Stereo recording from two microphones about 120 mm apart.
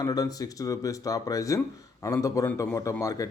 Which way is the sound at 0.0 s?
30° left (ahead or behind).